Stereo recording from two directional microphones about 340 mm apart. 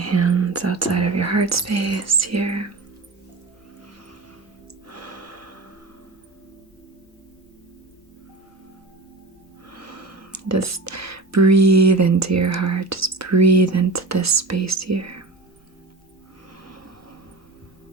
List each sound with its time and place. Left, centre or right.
0.0 s speech: right
4.9 s gasp: right
9.6 s speech: right
16.6 s a sound: right